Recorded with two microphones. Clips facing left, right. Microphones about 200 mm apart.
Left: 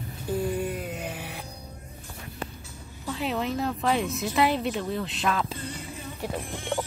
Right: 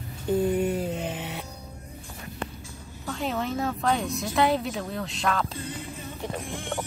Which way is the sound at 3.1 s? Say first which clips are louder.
Even; centre (ahead or behind).